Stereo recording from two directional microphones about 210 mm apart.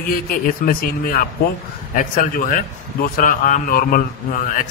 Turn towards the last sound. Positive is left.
turn(degrees=40)  # may be behind; listen again after turning